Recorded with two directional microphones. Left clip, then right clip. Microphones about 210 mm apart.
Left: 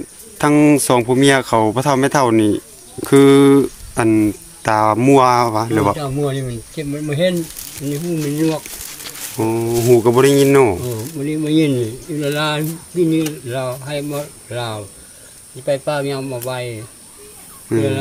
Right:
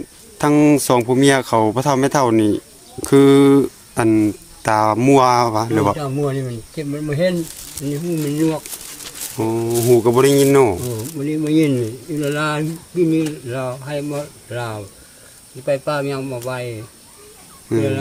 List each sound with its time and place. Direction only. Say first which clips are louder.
0.3 s speech: left 1 dB; centre (ahead or behind)